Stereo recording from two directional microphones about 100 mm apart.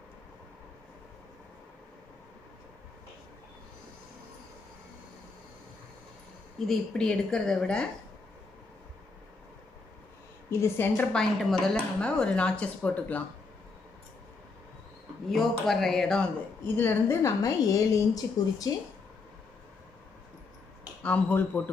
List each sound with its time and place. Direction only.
6.7 s a woman's voice: 5° left (ahead or behind)
10.5 s a woman's voice: 30° left (ahead or behind)
11.0 s a woman's voice: 5° left (ahead or behind)
15.2 s a woman's voice: centre (ahead or behind)
16.6 s a woman's voice: 20° left (ahead or behind)
21.0 s a woman's voice: 15° left (ahead or behind)